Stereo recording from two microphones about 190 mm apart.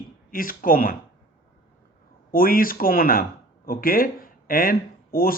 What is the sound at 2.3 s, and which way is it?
Speech, 50° left (ahead or behind).